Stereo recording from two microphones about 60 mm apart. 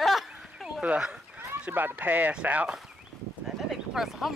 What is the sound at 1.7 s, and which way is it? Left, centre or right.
Speech, right.